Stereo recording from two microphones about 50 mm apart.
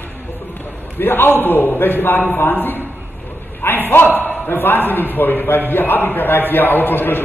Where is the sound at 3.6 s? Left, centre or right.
Left.